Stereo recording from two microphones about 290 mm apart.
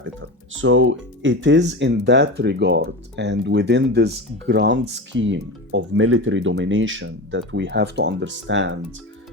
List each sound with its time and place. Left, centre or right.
0.0 s speech: right